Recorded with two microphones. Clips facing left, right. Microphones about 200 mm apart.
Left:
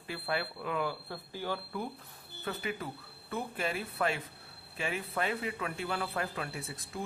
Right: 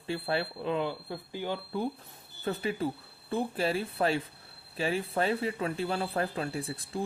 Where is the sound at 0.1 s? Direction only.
30° right (ahead or behind).